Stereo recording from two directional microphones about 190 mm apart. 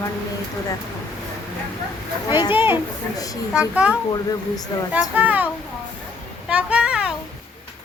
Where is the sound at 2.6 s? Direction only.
10° right (ahead or behind).